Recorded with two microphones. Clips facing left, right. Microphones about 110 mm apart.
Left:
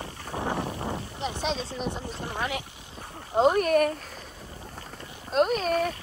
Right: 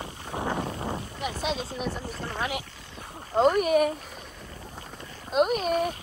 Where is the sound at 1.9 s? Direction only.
25° left (ahead or behind).